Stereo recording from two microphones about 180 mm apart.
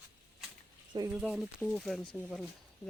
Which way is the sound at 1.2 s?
Centre (ahead or behind).